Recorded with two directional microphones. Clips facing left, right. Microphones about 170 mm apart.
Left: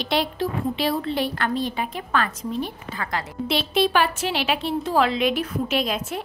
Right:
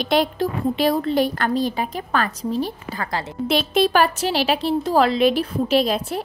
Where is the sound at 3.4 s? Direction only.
45° right (ahead or behind).